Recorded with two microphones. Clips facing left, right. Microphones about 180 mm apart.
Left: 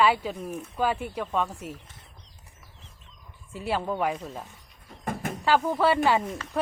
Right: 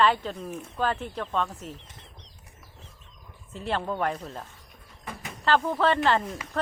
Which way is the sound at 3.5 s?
10° left (ahead or behind).